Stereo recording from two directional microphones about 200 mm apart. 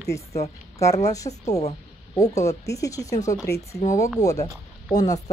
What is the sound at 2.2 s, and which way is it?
Speech, 15° left (ahead or behind).